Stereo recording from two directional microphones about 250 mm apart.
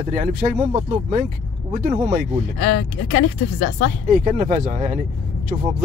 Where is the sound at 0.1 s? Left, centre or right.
Right.